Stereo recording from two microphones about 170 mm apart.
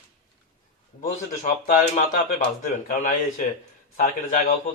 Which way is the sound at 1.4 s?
50° left (ahead or behind).